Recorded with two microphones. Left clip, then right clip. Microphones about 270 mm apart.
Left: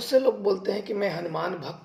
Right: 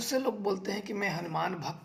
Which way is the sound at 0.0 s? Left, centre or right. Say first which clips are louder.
Left 9 dB; right.